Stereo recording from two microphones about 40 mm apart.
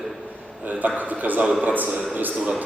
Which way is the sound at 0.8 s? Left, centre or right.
Right.